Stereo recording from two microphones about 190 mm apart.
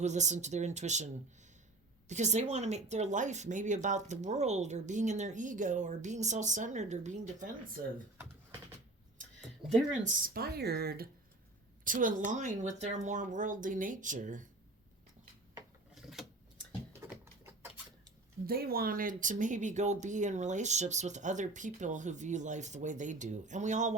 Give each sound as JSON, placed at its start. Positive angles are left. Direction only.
{"t": 0.0, "sound": "speech", "side_deg": -40}
{"t": 10.0, "sound": "speech", "side_deg": -50}
{"t": 11.9, "sound": "speech", "side_deg": -45}
{"t": 16.0, "sound": "vehicle", "side_deg": 0}
{"t": 18.4, "sound": "speech", "side_deg": -55}